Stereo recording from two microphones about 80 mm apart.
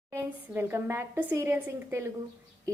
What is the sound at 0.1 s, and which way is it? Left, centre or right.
A woman's voice, right.